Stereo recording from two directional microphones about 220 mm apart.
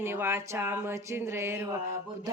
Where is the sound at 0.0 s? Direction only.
10° right (ahead or behind).